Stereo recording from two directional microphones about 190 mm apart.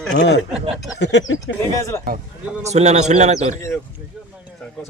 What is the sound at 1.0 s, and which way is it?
Speech, 65° left (ahead or behind).